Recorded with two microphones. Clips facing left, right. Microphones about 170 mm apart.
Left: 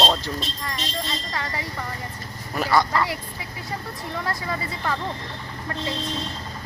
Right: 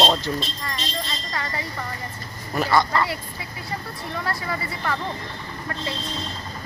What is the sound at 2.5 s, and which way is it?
Speech, 10° left (ahead or behind).